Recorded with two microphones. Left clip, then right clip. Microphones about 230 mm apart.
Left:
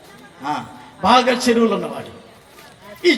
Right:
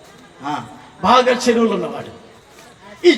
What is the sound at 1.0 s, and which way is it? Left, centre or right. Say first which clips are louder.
Speech: right 1 dB; centre.